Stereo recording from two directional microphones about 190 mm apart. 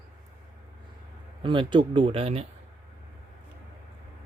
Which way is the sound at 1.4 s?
25° right (ahead or behind).